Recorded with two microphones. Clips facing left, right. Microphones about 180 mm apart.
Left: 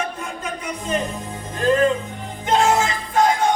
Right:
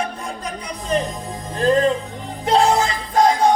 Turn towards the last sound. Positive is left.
turn(degrees=-35)  # may be behind; listen again after turning